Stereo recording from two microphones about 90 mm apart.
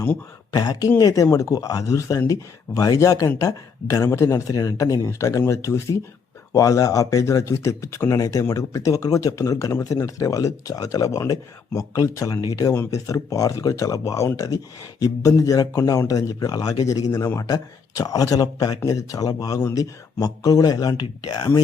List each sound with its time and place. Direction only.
0.5 s speech: 45° left (ahead or behind)
12.7 s speech: 25° left (ahead or behind)
13.1 s speech: 40° left (ahead or behind)